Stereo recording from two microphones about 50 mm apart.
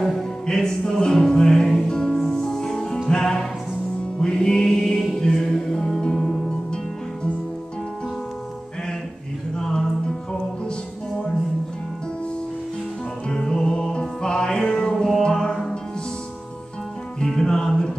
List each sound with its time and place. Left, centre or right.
0.0 s music: centre
9.6 s music: centre
13.3 s music: centre
17.3 s music: centre